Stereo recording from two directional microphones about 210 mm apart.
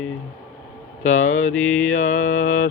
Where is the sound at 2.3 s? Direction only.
75° left (ahead or behind).